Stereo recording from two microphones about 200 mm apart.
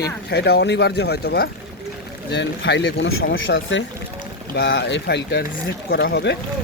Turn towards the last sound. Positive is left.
turn(degrees=55)  # may be behind; listen again after turning